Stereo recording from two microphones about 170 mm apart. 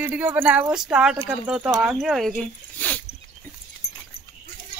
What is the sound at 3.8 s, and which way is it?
Dog, 70° left (ahead or behind).